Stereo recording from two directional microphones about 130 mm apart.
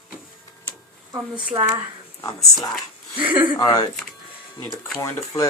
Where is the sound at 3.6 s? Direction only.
30° left (ahead or behind).